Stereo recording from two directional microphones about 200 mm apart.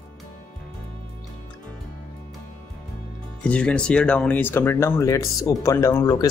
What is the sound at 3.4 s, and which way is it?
Speech, 5° left (ahead or behind).